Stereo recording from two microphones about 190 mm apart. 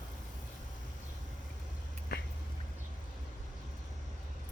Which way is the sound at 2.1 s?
55° left (ahead or behind).